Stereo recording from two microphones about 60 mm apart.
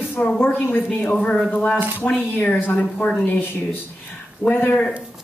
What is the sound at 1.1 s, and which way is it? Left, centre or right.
A woman's voice, centre.